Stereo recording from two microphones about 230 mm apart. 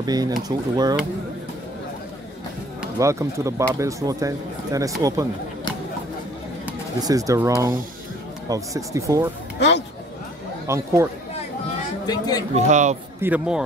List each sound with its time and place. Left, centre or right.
0.0 s speech: centre
2.8 s speech: centre
6.6 s speech: centre
9.6 s a sound: left
10.7 s speech: centre
12.1 s a man's voice: centre
12.5 s a man's voice: right
13.2 s speech: centre